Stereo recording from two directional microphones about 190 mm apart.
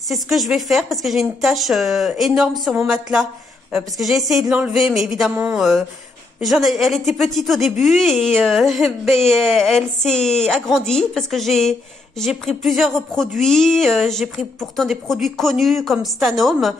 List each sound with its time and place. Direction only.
0.1 s speech: centre (ahead or behind)